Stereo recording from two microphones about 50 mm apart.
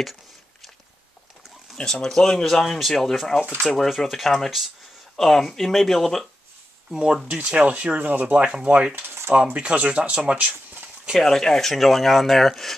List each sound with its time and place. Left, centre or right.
1.8 s speech: centre
7.2 s speech: right
8.9 s a sound: right
9.3 s speech: right
10.3 s speech: right
11.1 s speech: centre